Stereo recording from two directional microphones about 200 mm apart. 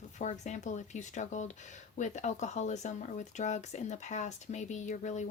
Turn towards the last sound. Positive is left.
turn(degrees=35)  # may be behind; listen again after turning